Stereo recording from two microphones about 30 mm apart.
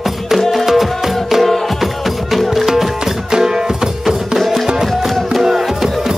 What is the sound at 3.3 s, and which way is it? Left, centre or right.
Music, right.